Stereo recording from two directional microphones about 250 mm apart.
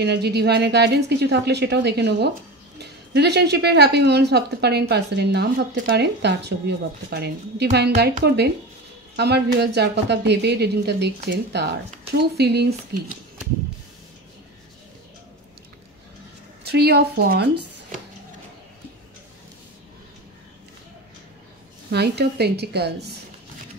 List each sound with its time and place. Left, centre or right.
0.0 s speech: right
16.6 s speech: right
21.9 s speech: right